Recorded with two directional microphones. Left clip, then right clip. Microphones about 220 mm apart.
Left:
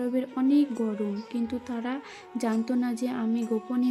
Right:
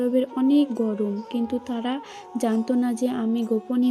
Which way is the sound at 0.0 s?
15° right (ahead or behind).